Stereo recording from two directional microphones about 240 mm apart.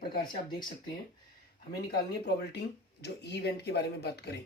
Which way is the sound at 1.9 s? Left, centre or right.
Left.